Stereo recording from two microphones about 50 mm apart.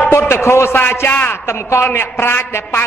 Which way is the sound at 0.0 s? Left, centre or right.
Left.